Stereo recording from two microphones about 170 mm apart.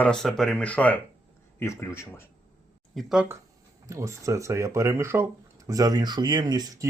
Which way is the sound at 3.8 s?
15° right (ahead or behind).